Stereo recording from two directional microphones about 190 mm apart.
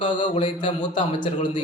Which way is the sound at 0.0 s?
25° left (ahead or behind).